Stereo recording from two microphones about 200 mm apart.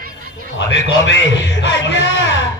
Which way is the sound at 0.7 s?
60° left (ahead or behind).